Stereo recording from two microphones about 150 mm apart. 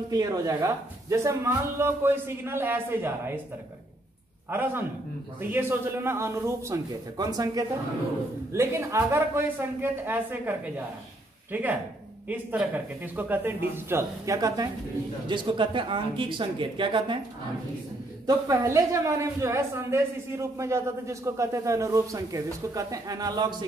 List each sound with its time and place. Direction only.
0.1 s speech: 25° right (ahead or behind)
4.5 s a woman's voice: 15° right (ahead or behind)
15.2 s speech: 35° right (ahead or behind)
18.2 s a woman's voice: 20° right (ahead or behind)